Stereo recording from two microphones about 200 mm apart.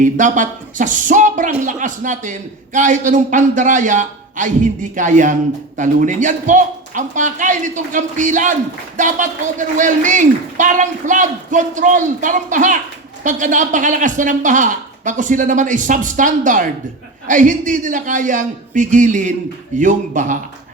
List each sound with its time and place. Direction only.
0.0 s a man's voice: 40° right (ahead or behind)